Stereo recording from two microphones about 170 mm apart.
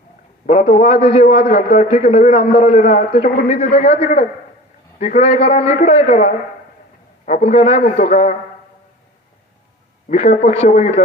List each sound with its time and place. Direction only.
0.4 s a man's voice: 45° left (ahead or behind)
10.1 s a man's voice: 40° left (ahead or behind)